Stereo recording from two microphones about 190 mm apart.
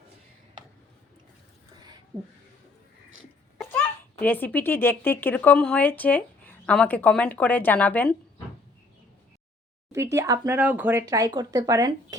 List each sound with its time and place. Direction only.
4.2 s speech: 10° left (ahead or behind)
9.9 s speech: 15° right (ahead or behind)